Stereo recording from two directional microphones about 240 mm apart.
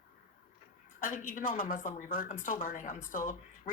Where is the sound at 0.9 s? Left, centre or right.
Left.